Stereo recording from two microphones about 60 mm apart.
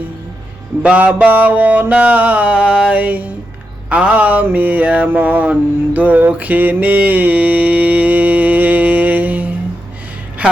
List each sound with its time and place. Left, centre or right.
0.8 s mantra: right
10.4 s music: right